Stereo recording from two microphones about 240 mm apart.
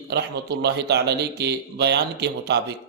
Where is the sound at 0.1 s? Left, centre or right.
Right.